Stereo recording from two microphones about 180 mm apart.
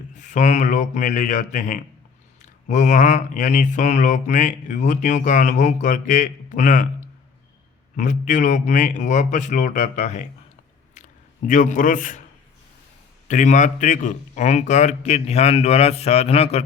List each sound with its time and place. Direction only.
0.2 s speech: 45° left (ahead or behind)
7.9 s speech: 45° left (ahead or behind)
11.4 s speech: 45° left (ahead or behind)
13.2 s a man's voice: 45° left (ahead or behind)